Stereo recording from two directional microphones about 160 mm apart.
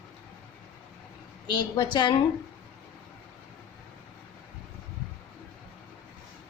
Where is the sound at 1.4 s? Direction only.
30° left (ahead or behind).